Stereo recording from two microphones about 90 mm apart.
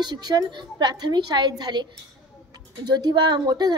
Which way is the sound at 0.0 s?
50° right (ahead or behind).